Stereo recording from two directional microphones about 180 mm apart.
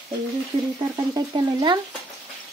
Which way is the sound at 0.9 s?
25° right (ahead or behind).